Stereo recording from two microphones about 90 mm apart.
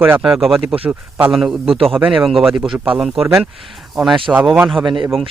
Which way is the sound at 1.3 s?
Centre (ahead or behind).